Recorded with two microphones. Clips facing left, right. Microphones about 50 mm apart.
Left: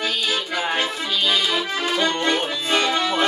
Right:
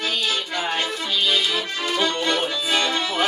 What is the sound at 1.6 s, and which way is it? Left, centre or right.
Accordion, centre.